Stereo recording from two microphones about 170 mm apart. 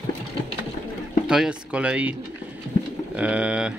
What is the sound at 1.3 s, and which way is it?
Speech, 5° right (ahead or behind).